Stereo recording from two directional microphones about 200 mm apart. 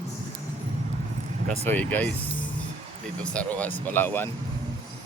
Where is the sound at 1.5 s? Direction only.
5° left (ahead or behind).